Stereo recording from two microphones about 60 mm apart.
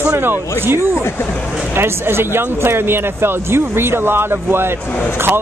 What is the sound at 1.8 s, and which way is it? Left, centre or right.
Speech, right.